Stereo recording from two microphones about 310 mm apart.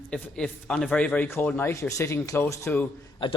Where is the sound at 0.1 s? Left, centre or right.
Centre.